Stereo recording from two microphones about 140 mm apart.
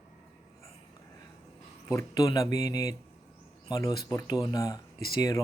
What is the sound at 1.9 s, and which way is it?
Speech, 20° left (ahead or behind).